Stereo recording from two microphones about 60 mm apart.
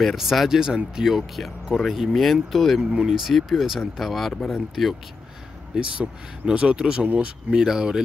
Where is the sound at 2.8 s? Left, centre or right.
Centre.